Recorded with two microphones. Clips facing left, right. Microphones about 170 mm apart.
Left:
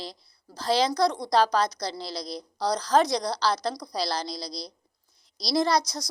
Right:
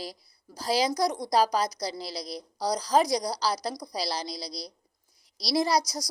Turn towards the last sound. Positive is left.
turn(degrees=-35)  # may be behind; listen again after turning